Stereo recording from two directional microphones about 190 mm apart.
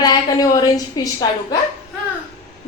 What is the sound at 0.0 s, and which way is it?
A woman's voice, 20° left (ahead or behind).